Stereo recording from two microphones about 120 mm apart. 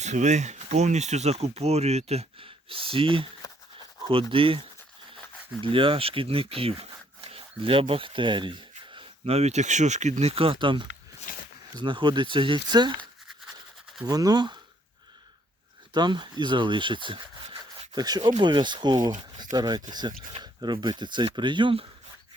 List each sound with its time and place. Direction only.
0.0 s speech: 75° right (ahead or behind); by 13.0 s 40° right (ahead or behind)
14.0 s speech: 30° right (ahead or behind)
15.9 s speech: 40° right (ahead or behind)